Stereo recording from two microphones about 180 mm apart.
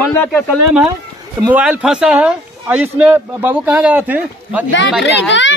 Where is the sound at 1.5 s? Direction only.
5° right (ahead or behind).